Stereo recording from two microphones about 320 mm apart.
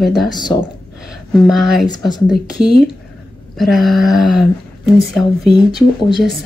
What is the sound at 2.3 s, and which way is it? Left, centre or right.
Speech, left.